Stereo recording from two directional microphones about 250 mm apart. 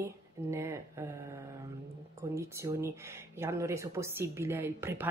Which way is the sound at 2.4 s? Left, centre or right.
Centre.